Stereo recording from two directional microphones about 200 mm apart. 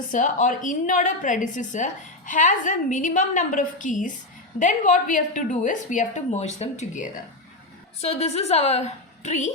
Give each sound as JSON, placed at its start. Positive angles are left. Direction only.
{"t": 0.1, "sound": "a woman's voice", "side_deg": 40}